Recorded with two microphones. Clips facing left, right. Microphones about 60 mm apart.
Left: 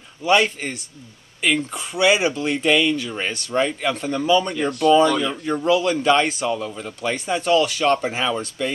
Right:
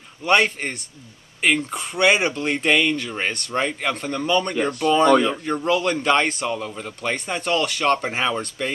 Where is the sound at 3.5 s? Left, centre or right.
Centre.